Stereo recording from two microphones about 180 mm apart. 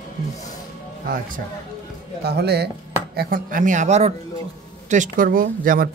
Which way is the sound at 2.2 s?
65° right (ahead or behind).